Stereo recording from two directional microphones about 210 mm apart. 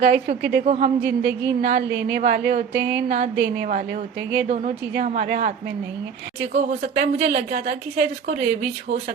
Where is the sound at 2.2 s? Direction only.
40° right (ahead or behind).